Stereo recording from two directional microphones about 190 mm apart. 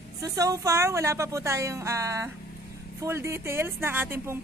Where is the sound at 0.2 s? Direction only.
15° right (ahead or behind).